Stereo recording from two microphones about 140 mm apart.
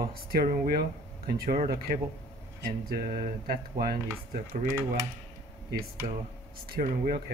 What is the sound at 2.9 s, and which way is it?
Speech, 90° right.